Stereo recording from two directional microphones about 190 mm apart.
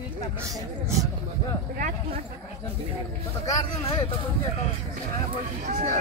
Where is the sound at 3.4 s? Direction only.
20° left (ahead or behind).